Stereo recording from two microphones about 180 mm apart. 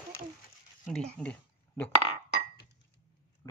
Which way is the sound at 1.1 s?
5° left (ahead or behind).